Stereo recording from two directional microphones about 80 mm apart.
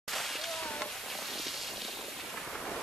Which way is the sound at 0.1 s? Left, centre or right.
Centre.